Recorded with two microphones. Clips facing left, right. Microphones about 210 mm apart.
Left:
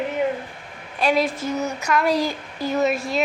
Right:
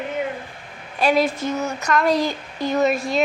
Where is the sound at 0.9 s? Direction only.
Centre (ahead or behind).